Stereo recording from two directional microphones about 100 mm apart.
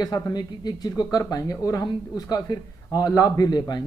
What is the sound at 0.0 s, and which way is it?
Speech, 45° left (ahead or behind).